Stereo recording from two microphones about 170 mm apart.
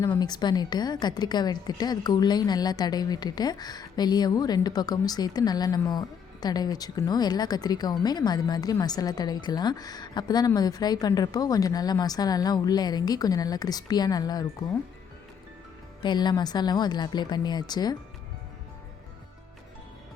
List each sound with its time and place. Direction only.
0.0 s a woman's voice: 20° left (ahead or behind)
16.0 s a woman's voice: 25° left (ahead or behind)